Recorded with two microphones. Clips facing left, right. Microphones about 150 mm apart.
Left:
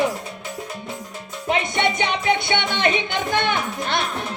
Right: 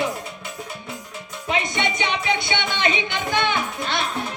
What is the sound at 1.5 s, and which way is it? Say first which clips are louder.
Music: left 3 dB; 50° left (ahead or behind).